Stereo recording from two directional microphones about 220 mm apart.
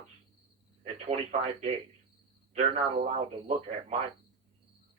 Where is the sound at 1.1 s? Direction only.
30° right (ahead or behind).